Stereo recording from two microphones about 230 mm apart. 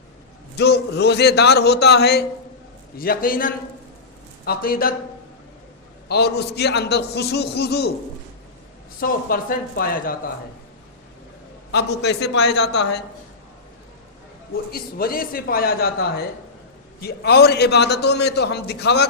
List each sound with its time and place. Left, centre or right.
0.5 s a man's voice: left
6.1 s a man's voice: left
9.0 s speech: left
11.7 s a man's voice: left
14.7 s a man's voice: left